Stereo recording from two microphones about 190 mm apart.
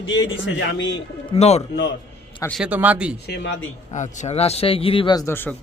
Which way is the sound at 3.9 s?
40° left (ahead or behind).